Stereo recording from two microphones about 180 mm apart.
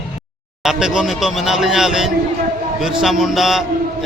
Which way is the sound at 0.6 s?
5° right (ahead or behind).